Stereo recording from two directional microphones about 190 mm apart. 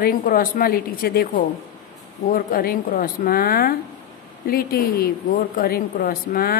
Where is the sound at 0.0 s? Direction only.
50° left (ahead or behind).